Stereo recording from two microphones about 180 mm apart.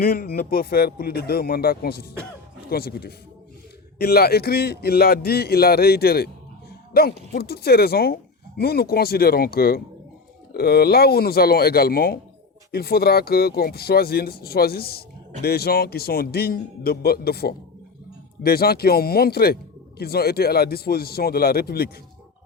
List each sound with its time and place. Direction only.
0.0 s a man's voice: 55° left (ahead or behind)